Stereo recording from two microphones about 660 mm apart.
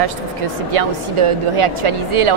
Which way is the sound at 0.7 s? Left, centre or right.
Right.